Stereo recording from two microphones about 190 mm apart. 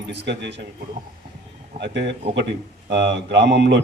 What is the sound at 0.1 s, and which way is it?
Speech, 65° right (ahead or behind).